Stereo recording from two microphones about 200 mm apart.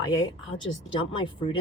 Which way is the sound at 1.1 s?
25° left (ahead or behind).